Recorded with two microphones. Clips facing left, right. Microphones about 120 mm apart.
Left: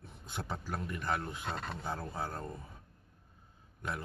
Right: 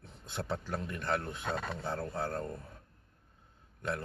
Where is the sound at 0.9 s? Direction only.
10° left (ahead or behind).